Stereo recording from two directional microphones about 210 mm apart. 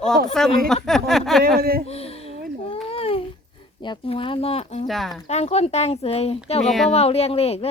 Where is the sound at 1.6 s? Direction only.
45° right (ahead or behind).